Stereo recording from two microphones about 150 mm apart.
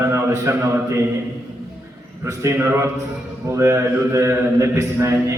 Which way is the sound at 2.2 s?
15° right (ahead or behind).